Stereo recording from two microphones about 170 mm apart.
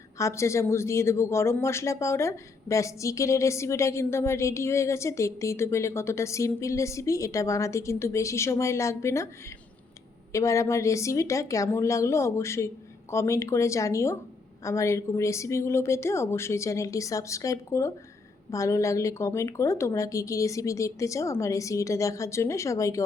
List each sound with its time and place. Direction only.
0.2 s speech: 15° left (ahead or behind)
10.3 s speech: 20° left (ahead or behind)